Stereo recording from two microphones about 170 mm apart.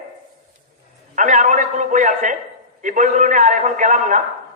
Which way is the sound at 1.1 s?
45° right (ahead or behind).